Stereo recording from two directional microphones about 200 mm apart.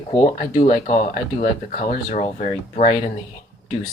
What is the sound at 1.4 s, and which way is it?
Speech, 40° left (ahead or behind).